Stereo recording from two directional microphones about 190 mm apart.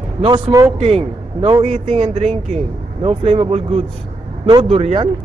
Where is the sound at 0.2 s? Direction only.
20° right (ahead or behind).